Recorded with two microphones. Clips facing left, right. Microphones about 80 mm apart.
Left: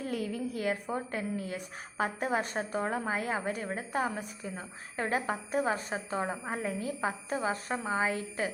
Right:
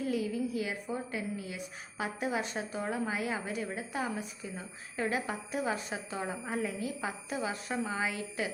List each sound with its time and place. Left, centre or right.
0.0 s a woman's voice: left